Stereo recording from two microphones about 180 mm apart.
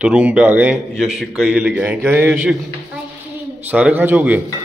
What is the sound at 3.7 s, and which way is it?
Speech, 10° right (ahead or behind).